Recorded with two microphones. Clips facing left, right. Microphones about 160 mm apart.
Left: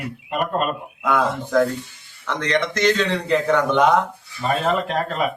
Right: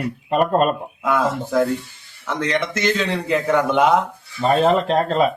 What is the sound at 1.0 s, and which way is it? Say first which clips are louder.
A man's voice: even; 5° right (ahead or behind).